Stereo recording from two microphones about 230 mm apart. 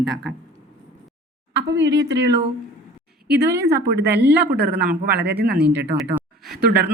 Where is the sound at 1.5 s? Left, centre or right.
Right.